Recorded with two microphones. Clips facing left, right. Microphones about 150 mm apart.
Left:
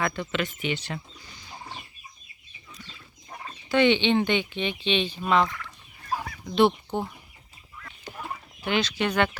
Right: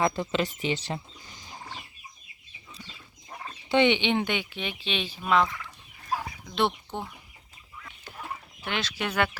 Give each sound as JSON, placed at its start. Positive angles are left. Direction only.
{"t": 0.0, "sound": "speech", "side_deg": -35}
{"t": 3.7, "sound": "speech", "side_deg": -20}
{"t": 7.8, "sound": "duck", "side_deg": -5}
{"t": 8.6, "sound": "speech", "side_deg": 0}